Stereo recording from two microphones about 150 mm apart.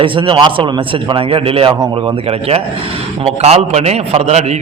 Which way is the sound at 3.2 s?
45° right (ahead or behind).